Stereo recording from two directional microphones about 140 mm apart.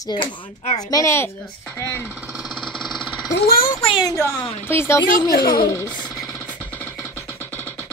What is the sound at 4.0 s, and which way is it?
Speech, 25° left (ahead or behind).